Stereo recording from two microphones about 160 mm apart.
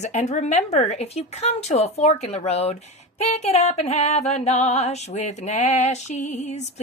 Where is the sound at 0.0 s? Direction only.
45° left (ahead or behind).